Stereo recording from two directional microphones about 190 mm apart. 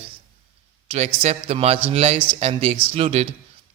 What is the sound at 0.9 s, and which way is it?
A man's voice, 35° right (ahead or behind).